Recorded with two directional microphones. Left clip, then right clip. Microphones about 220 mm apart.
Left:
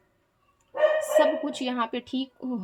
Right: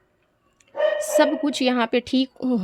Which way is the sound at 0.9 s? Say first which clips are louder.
Right 2 dB; 50° right (ahead or behind).